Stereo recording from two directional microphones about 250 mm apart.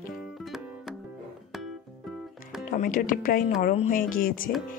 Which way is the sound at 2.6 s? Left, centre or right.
Left.